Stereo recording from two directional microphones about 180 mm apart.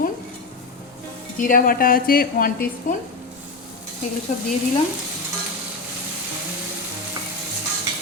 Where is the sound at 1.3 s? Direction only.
50° left (ahead or behind).